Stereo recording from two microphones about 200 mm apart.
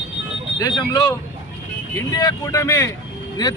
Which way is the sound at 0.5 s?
20° left (ahead or behind).